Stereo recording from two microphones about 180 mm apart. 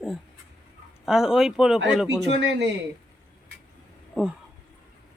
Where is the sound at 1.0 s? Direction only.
Centre (ahead or behind).